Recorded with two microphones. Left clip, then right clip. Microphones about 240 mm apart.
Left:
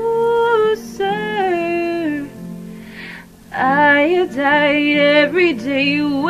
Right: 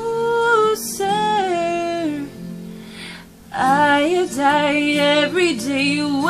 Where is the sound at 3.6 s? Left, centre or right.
Centre.